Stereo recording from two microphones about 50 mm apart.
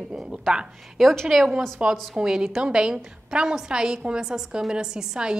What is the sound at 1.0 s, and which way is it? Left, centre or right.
Speech, centre.